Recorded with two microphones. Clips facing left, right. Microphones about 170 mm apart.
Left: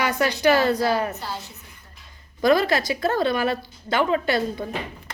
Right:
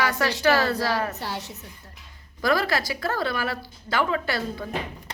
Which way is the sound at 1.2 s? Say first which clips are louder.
Right 1 dB; 80° right.